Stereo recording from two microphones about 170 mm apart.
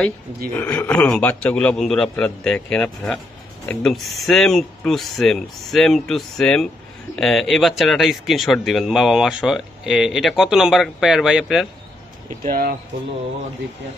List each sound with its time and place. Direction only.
0.6 s a man's voice: 10° left (ahead or behind)
12.4 s speech: 55° right (ahead or behind)